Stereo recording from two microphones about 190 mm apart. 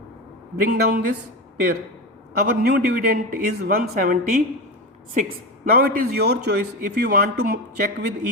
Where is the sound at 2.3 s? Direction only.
60° right (ahead or behind).